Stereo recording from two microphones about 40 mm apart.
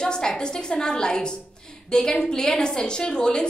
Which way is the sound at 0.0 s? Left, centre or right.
Centre.